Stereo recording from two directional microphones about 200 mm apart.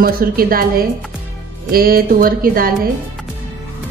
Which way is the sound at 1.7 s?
50° right (ahead or behind).